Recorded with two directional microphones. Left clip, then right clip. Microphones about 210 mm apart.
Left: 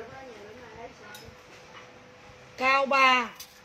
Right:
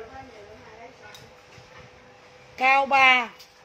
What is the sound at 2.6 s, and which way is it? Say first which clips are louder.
Speech: right 4 dB; 20° right (ahead or behind).